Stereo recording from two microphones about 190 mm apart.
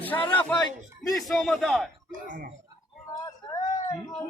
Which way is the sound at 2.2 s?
45° right (ahead or behind).